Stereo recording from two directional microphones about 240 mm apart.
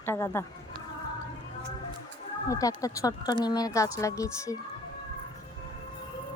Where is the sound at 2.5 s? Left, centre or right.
Centre.